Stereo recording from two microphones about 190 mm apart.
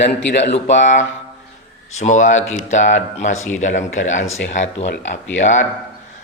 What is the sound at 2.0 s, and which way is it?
Speech, 40° left (ahead or behind).